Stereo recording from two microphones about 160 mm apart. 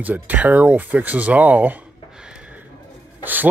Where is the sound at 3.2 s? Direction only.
10° right (ahead or behind).